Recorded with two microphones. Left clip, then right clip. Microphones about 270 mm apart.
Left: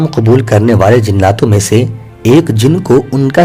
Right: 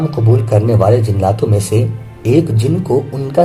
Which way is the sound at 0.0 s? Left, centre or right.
Left.